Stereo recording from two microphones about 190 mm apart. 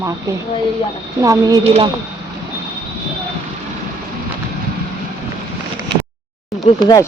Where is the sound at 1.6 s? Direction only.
35° right (ahead or behind).